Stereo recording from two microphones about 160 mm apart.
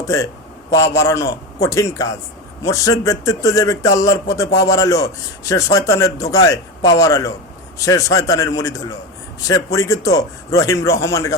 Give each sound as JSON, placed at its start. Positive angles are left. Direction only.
{"t": 0.7, "sound": "a man's voice", "side_deg": 20}